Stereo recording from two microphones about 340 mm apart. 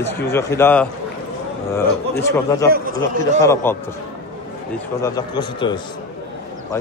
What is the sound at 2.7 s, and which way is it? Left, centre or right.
Speech, right.